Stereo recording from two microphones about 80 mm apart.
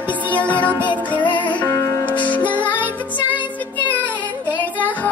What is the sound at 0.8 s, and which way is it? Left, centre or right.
Music, left.